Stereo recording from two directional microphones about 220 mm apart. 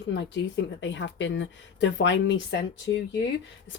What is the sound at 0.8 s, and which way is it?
Speech, 55° left (ahead or behind).